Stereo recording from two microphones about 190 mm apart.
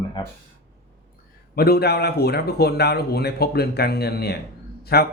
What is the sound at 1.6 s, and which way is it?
A man's voice, 55° left (ahead or behind).